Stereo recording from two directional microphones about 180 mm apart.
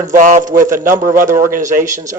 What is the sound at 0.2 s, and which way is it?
A man's voice, 45° right (ahead or behind).